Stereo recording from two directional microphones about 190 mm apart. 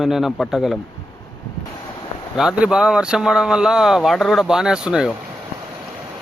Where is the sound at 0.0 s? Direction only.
Centre (ahead or behind).